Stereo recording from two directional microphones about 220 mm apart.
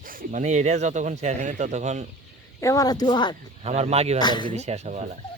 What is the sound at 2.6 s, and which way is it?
Speech, 15° left (ahead or behind).